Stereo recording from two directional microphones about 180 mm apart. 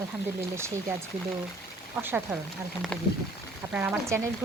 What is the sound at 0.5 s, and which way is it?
Speech, 15° right (ahead or behind).